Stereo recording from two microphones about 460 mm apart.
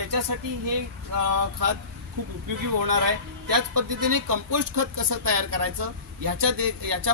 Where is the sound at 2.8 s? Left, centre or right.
Right.